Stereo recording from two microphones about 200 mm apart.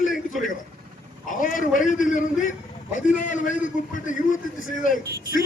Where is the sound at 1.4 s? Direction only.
40° left (ahead or behind).